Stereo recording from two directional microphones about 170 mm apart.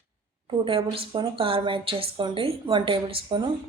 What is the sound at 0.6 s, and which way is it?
A woman's voice, 30° right (ahead or behind).